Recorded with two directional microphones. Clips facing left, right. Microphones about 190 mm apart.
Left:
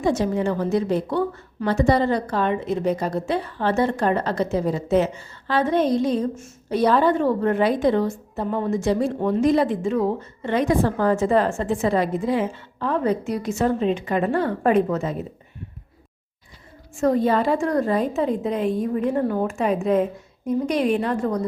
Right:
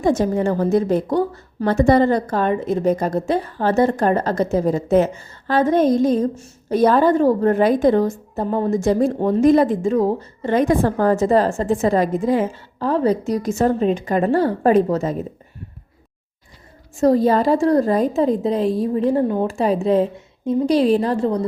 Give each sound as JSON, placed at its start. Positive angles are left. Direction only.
{"t": 0.0, "sound": "a woman's voice", "side_deg": -45}
{"t": 1.7, "sound": "a woman's voice", "side_deg": -50}
{"t": 17.0, "sound": "a woman's voice", "side_deg": -35}
{"t": 19.5, "sound": "a woman's voice", "side_deg": -35}